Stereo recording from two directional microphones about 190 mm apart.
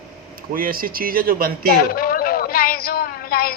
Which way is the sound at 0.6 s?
50° right (ahead or behind).